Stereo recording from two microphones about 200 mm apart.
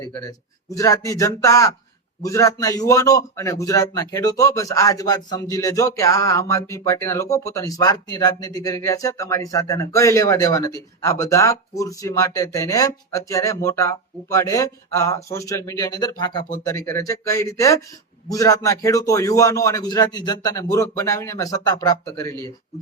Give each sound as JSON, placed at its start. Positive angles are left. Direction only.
{"t": 0.3, "sound": "speech", "side_deg": 15}